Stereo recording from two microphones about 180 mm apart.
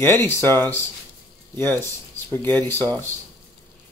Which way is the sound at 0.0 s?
15° left (ahead or behind).